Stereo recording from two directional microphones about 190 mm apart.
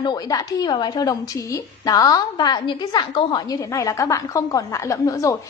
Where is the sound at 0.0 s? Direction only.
20° left (ahead or behind).